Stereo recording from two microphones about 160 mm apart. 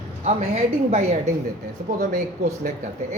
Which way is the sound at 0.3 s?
40° right (ahead or behind).